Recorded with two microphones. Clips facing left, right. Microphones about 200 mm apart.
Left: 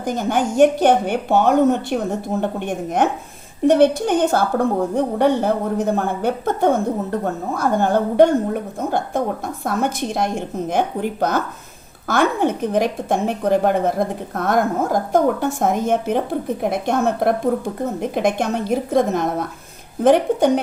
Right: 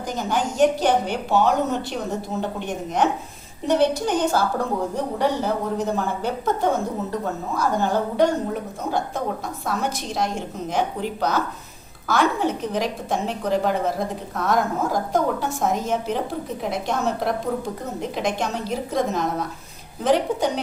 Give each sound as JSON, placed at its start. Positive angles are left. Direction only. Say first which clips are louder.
{"t": 0.0, "sound": "a woman's voice", "louder": "left 5 dB", "side_deg": 55}